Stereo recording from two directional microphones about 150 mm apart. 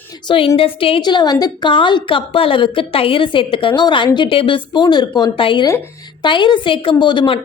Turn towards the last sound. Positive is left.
turn(degrees=30)  # may be behind; listen again after turning